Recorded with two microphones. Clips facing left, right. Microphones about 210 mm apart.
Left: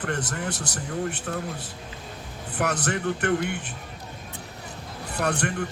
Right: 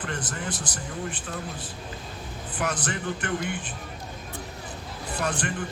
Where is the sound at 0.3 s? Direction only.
65° left (ahead or behind).